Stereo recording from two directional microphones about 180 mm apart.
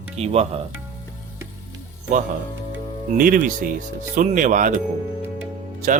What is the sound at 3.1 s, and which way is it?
Speech, 50° right (ahead or behind).